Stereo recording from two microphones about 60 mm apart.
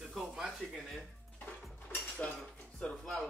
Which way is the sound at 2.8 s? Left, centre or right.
Left.